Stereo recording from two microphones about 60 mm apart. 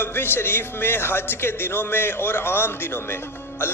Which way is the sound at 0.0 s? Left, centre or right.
Left.